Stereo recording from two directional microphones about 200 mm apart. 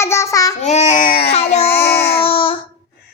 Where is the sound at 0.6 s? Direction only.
35° left (ahead or behind).